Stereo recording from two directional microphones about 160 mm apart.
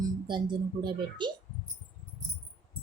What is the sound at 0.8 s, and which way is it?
Speech, 30° right (ahead or behind).